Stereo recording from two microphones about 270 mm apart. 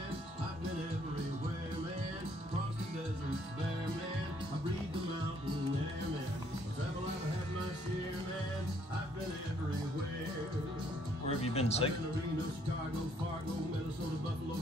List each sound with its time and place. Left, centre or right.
11.4 s speech: left